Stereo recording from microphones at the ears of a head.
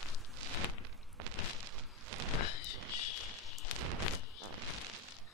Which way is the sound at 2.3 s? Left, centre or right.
Left.